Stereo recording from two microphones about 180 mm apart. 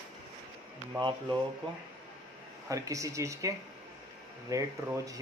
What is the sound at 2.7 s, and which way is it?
Speech, 20° right (ahead or behind).